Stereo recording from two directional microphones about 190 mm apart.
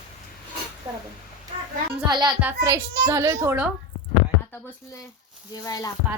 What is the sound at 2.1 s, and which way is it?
A woman's voice, 20° right (ahead or behind).